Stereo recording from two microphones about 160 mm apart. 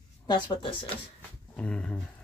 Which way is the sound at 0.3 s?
30° left (ahead or behind).